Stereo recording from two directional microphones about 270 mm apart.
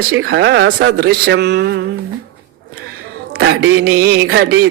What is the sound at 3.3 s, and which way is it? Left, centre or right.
Speech, right.